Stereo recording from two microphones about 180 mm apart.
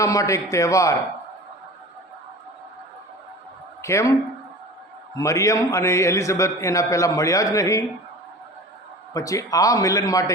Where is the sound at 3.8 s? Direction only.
15° left (ahead or behind).